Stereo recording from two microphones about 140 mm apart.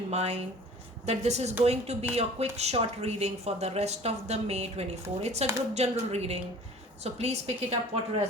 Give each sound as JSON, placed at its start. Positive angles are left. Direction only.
{"t": 0.1, "sound": "speech", "side_deg": -50}